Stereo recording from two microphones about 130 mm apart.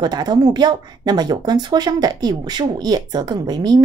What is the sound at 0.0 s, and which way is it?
Speech, 30° right (ahead or behind).